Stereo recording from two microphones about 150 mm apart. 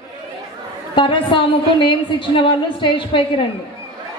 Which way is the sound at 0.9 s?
35° left (ahead or behind).